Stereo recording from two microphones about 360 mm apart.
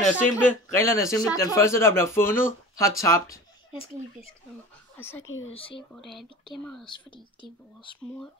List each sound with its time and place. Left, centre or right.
0.2 s speech: centre
5.2 s speech: left
5.5 s speech: centre
5.9 s speech: centre
6.9 s speech: centre